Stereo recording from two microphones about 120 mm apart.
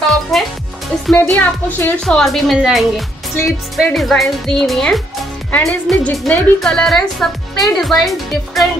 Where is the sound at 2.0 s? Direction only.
5° left (ahead or behind).